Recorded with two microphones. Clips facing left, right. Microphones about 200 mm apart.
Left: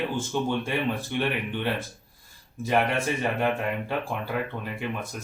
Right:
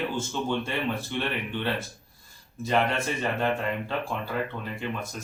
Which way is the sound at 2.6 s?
15° left (ahead or behind).